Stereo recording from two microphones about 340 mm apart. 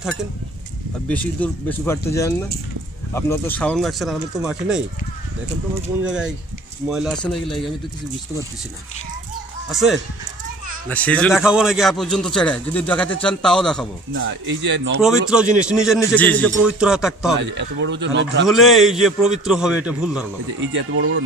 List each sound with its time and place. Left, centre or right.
0.0 s a man's voice: centre
6.0 s a man's voice: centre
9.7 s a man's voice: centre
14.1 s a man's voice: right
15.0 s a man's voice: centre
17.4 s a man's voice: right
18.5 s a man's voice: centre
20.6 s a man's voice: right